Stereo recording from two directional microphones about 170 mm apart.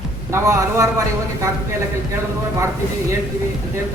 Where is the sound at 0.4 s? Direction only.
20° right (ahead or behind).